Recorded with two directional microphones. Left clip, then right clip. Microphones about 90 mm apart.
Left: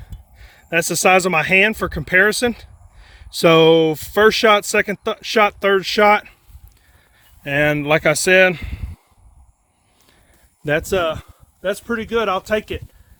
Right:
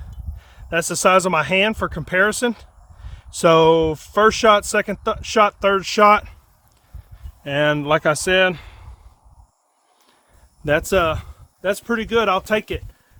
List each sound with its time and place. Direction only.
0.3 s speech: 20° left (ahead or behind)
7.4 s speech: 30° left (ahead or behind)
8.5 s a sound: 20° left (ahead or behind)
10.8 s speech: 20° right (ahead or behind)